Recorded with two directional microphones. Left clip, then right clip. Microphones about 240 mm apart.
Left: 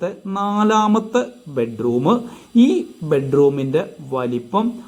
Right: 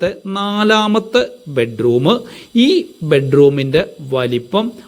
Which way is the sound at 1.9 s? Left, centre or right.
Centre.